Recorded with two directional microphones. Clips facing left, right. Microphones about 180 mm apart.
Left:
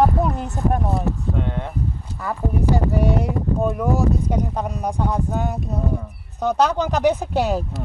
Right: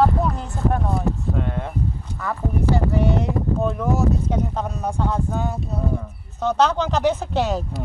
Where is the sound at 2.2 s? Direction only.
10° left (ahead or behind).